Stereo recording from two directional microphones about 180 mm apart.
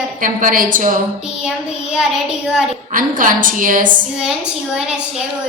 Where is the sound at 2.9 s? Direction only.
50° right (ahead or behind).